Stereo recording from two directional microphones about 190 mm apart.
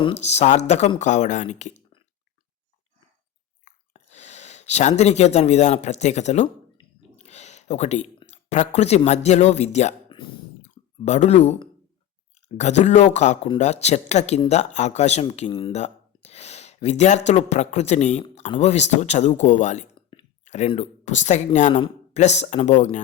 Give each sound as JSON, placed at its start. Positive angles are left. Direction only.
{"t": 0.0, "sound": "speech", "side_deg": 35}
{"t": 3.6, "sound": "speech", "side_deg": 35}
{"t": 7.2, "sound": "a sound", "side_deg": 35}
{"t": 8.3, "sound": "speech", "side_deg": 35}
{"t": 10.6, "sound": "clicking", "side_deg": 35}
{"t": 12.5, "sound": "speech", "side_deg": 35}